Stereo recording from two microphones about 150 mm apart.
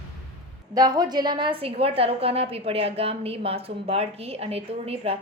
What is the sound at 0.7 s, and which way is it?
A woman's voice, 25° right (ahead or behind).